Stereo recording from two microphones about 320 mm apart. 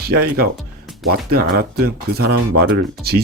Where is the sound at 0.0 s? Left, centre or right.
Right.